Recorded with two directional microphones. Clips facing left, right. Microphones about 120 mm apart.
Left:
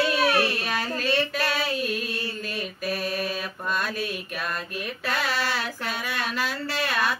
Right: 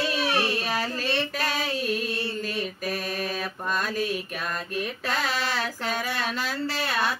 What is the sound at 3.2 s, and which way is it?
Mantra, 40° right (ahead or behind).